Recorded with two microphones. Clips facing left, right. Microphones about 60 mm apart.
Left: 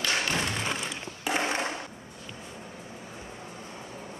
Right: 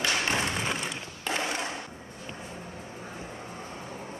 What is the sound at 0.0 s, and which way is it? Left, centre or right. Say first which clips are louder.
Thump: right 1 dB; right.